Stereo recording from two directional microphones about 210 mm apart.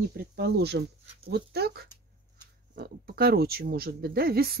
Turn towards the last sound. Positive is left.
turn(degrees=-45)  # may be behind; listen again after turning